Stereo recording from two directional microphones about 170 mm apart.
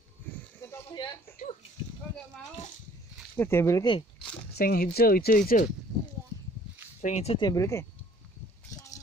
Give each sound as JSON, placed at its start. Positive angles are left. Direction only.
{"t": 0.6, "sound": "a sound", "side_deg": 20}
{"t": 3.3, "sound": "speech", "side_deg": 15}
{"t": 4.6, "sound": "speech", "side_deg": 65}
{"t": 7.0, "sound": "speech", "side_deg": 45}
{"t": 7.3, "sound": "speech", "side_deg": 20}
{"t": 8.7, "sound": "a sound", "side_deg": 20}